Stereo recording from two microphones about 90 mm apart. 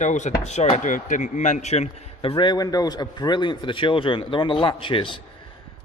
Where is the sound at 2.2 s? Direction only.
65° left (ahead or behind).